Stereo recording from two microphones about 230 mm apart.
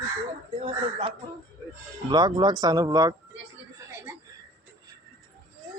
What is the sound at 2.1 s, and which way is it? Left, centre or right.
Speech, centre.